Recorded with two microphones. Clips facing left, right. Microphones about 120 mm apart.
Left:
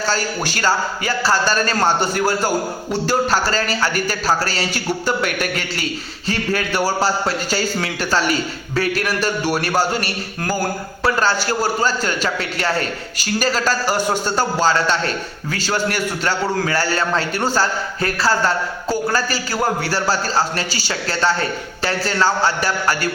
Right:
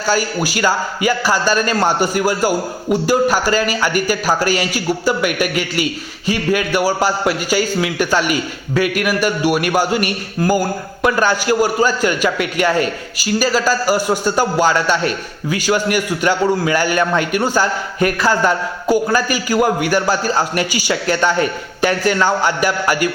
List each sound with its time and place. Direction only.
0.0 s a man's voice: 10° right (ahead or behind)